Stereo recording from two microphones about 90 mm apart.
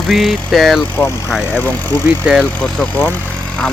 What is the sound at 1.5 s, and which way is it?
Speech, 20° left (ahead or behind).